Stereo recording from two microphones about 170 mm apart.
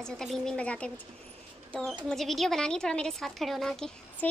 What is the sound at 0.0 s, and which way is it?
Speech, 5° left (ahead or behind).